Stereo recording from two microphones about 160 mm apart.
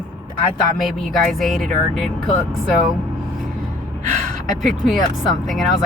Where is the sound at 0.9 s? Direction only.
Centre (ahead or behind).